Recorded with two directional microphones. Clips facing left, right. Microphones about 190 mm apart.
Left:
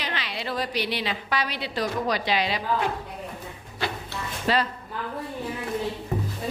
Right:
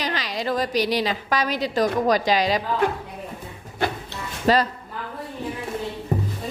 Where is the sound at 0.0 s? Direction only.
40° right (ahead or behind).